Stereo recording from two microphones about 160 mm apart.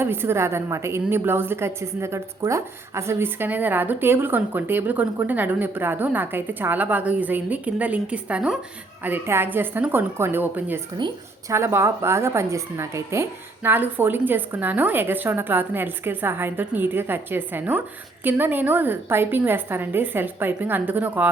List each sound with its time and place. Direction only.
0.0 s a woman's voice: 15° right (ahead or behind)
10.9 s a woman's voice: 30° right (ahead or behind)
11.5 s a woman's voice: 15° right (ahead or behind)